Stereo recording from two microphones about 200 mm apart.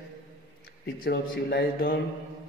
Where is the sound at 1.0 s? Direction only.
55° left (ahead or behind).